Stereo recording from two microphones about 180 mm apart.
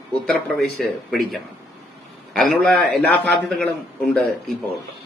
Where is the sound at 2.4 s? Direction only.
Centre (ahead or behind).